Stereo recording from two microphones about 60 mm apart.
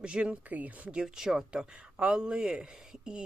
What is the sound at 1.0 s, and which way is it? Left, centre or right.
Speech, centre.